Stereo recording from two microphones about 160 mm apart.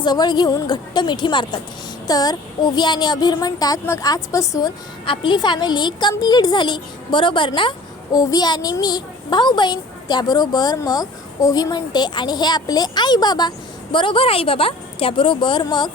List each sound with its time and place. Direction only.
0.0 s a woman's voice: 25° left (ahead or behind)
5.0 s a woman's voice: 30° left (ahead or behind)